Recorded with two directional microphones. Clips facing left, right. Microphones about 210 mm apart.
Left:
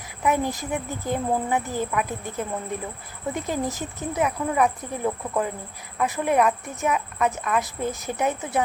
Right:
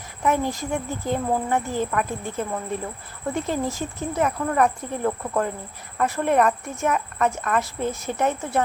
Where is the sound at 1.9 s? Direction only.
5° left (ahead or behind).